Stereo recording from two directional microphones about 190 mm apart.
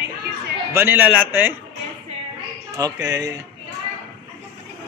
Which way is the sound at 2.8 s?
20° right (ahead or behind).